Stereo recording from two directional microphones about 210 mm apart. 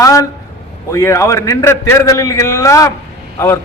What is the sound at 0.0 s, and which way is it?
A man's voice, 15° left (ahead or behind).